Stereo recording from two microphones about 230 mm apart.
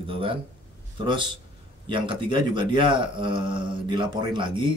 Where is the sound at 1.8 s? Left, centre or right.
Right.